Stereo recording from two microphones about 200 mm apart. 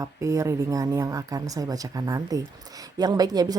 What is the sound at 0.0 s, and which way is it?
A woman's voice, 15° right (ahead or behind).